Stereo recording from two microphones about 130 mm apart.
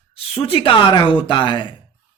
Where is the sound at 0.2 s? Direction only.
45° left (ahead or behind).